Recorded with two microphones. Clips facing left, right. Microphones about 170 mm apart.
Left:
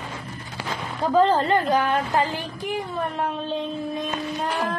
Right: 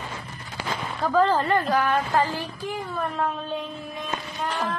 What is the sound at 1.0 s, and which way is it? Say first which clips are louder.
A woman's voice: left 2 dB; 20° left (ahead or behind).